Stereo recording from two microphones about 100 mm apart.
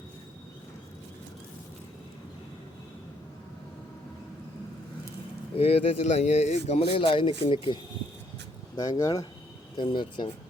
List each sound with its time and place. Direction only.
5.5 s speech: 75° left (ahead or behind); by 7.8 s 60° left (ahead or behind)
8.7 s speech: 40° left (ahead or behind)
9.7 s speech: 50° left (ahead or behind)